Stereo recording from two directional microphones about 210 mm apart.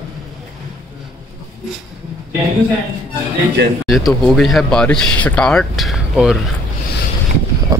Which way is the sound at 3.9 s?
Centre (ahead or behind).